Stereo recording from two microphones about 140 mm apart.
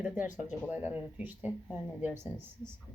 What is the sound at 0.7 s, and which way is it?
A woman's voice, 10° right (ahead or behind).